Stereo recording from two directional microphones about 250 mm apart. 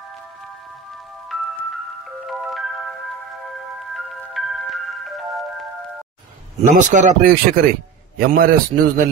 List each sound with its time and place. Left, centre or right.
2.2 s music: centre
3.9 s music: centre
6.6 s speech: right